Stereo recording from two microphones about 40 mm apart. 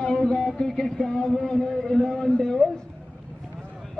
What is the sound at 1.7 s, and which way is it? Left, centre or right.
Speech, centre.